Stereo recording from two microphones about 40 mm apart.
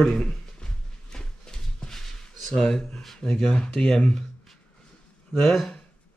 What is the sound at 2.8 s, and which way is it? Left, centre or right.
Speech, centre.